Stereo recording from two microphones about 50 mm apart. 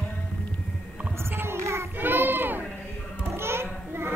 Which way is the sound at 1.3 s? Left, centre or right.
Right.